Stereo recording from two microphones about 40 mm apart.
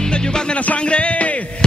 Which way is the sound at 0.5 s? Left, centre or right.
Left.